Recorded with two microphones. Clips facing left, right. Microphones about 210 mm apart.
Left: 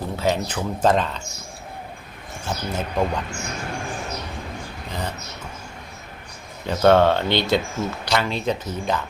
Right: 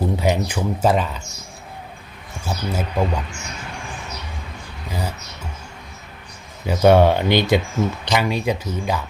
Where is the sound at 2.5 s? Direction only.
10° right (ahead or behind).